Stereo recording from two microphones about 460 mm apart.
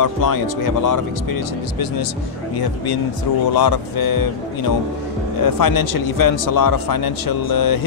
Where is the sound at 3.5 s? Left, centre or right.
Left.